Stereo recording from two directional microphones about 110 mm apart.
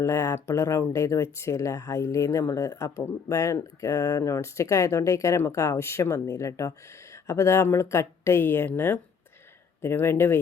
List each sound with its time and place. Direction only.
0.0 s speech: 30° left (ahead or behind)